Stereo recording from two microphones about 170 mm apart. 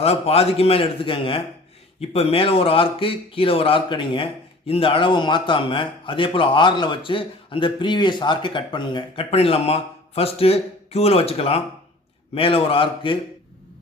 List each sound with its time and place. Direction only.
0.0 s a man's voice: 35° left (ahead or behind)